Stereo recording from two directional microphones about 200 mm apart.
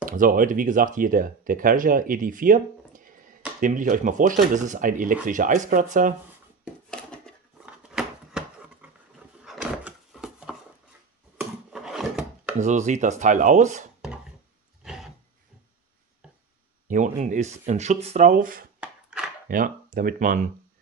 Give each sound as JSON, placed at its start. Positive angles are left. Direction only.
{"t": 0.0, "sound": "speech", "side_deg": -45}
{"t": 6.6, "sound": "a sound", "side_deg": 5}
{"t": 9.4, "sound": "drawer open or close", "side_deg": -5}
{"t": 11.3, "sound": "wood", "side_deg": -5}
{"t": 12.5, "sound": "speech", "side_deg": -35}
{"t": 14.8, "sound": "a sound", "side_deg": -5}
{"t": 16.8, "sound": "speech", "side_deg": -40}
{"t": 18.8, "sound": "a sound", "side_deg": -5}
{"t": 19.4, "sound": "speech", "side_deg": -40}